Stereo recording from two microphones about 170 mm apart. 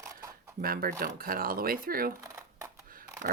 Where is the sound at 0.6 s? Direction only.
60° right (ahead or behind).